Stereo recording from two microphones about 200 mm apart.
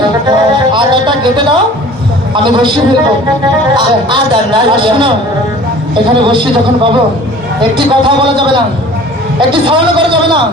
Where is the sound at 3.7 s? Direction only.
25° right (ahead or behind).